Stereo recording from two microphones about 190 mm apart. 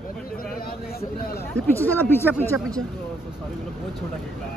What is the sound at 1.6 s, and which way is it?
Speech, 10° left (ahead or behind).